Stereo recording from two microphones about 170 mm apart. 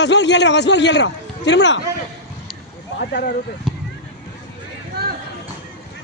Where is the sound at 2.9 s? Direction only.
75° left (ahead or behind).